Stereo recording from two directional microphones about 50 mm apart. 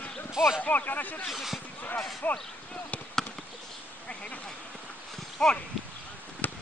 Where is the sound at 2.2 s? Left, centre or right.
Left.